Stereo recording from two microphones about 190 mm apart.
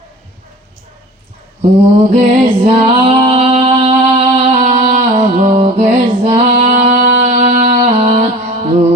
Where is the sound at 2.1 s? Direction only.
30° right (ahead or behind).